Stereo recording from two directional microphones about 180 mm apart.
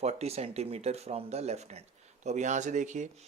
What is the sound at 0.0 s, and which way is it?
Speech, 35° right (ahead or behind).